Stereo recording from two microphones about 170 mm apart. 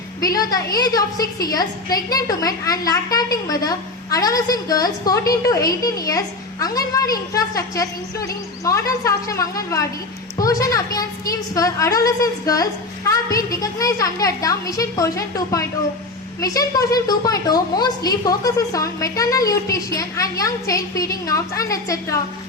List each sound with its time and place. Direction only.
0.2 s a woman's voice: 20° left (ahead or behind)